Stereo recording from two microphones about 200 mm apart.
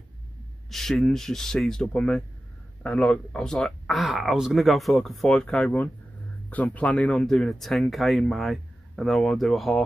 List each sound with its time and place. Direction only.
0.7 s speech: centre (ahead or behind)